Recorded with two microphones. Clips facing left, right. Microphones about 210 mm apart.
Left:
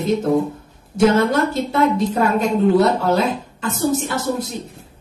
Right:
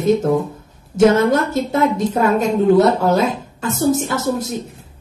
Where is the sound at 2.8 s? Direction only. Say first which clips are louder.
Right 3 dB; 45° right (ahead or behind).